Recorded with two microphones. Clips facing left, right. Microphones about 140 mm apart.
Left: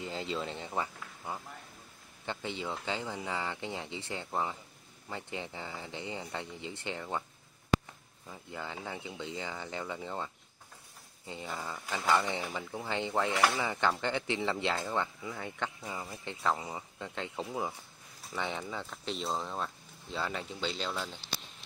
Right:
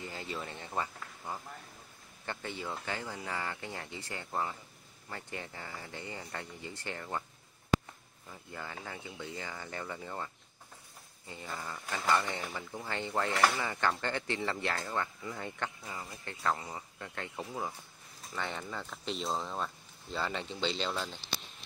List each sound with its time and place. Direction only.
0.0 s speech: 25° left (ahead or behind)
8.3 s speech: 15° left (ahead or behind)
11.4 s speech: 10° left (ahead or behind)